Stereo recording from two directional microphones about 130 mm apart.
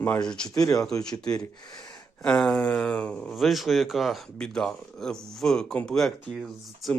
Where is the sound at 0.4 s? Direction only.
25° left (ahead or behind).